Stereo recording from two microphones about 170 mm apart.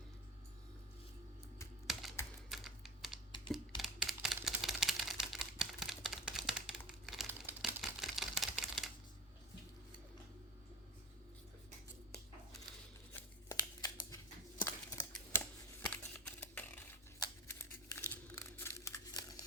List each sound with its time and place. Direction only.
1.9 s computer keyboard: centre (ahead or behind)
2.5 s typing: centre (ahead or behind)
3.5 s typewriter: centre (ahead or behind)
13.1 s scissors: 20° left (ahead or behind)
14.6 s a sound: 15° left (ahead or behind)
17.2 s crumpling: 20° left (ahead or behind)